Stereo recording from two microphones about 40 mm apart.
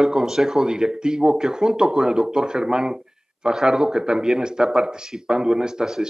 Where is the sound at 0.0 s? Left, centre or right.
Centre.